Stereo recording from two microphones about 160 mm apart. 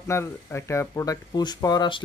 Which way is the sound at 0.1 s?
15° left (ahead or behind).